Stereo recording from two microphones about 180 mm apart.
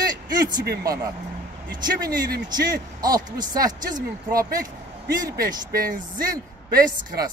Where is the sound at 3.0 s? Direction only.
20° right (ahead or behind).